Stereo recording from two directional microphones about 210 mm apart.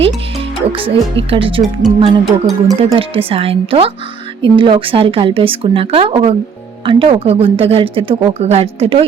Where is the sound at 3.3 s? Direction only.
25° right (ahead or behind).